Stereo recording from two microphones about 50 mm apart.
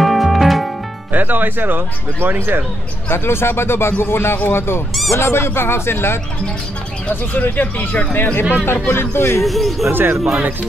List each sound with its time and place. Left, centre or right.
0.0 s music: centre
1.1 s speech: right
3.1 s speech: left
7.1 s speech: left
8.8 s speech: left
9.4 s speech: centre
9.8 s speech: right
10.1 s speech: centre